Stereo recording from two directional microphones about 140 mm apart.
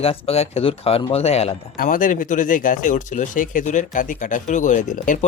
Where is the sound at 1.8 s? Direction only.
75° left (ahead or behind).